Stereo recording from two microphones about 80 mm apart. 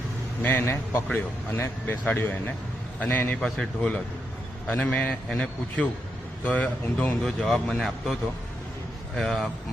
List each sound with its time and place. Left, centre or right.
0.4 s a man's voice: left; by 8.1 s centre
9.1 s speech: centre